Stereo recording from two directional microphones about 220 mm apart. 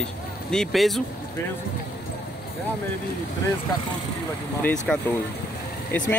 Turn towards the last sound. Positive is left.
turn(degrees=10)  # may be behind; listen again after turning